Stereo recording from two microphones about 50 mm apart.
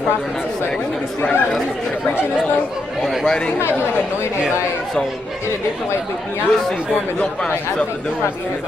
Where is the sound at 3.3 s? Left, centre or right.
Centre.